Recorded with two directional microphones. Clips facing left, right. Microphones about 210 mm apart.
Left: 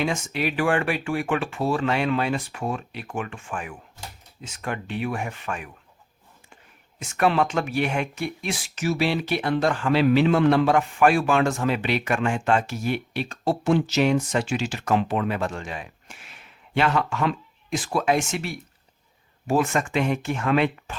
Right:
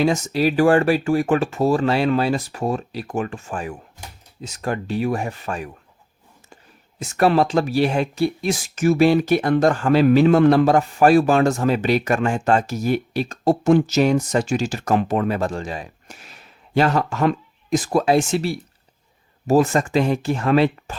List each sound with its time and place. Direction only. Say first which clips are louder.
0.0 s speech: right 7 dB; 40° right (ahead or behind)
7.0 s speech: right 5 dB; 40° right (ahead or behind)